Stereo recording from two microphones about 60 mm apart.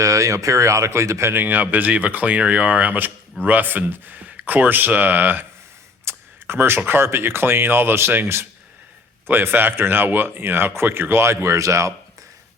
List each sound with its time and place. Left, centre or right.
0.0 s speech: right
1.3 s speech: right